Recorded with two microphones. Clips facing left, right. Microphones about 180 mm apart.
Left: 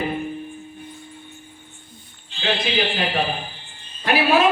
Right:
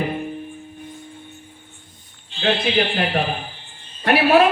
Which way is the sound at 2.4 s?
55° right (ahead or behind).